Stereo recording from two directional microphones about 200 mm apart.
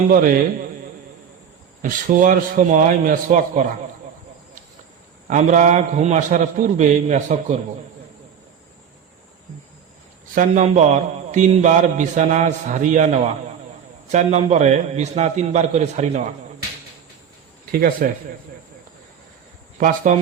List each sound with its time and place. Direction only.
0.1 s a man's voice: 45° right (ahead or behind)
1.8 s a man's voice: 40° right (ahead or behind)
5.3 s a man's voice: 35° right (ahead or behind)
10.3 s a man's voice: 40° right (ahead or behind)
17.7 s speech: 45° right (ahead or behind)